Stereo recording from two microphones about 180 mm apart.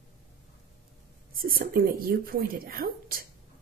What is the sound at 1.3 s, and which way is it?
Speech, 55° right (ahead or behind).